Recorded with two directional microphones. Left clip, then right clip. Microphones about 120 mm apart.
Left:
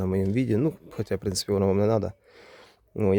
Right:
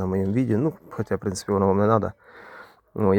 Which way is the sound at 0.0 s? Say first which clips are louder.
Right 1 dB; 35° left (ahead or behind).